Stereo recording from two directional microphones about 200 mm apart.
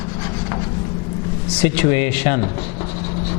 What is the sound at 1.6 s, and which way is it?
Speech, 10° left (ahead or behind).